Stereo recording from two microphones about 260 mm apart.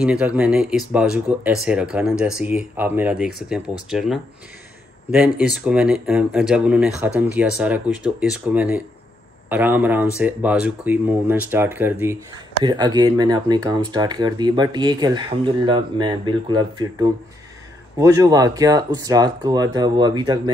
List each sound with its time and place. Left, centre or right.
0.0 s speech: centre